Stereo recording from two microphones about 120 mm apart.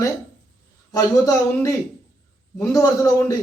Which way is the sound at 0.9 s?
30° left (ahead or behind).